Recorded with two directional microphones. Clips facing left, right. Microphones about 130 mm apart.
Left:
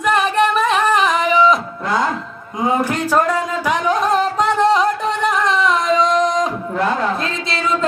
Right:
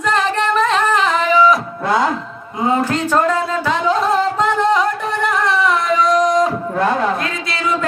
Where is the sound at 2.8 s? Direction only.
10° left (ahead or behind).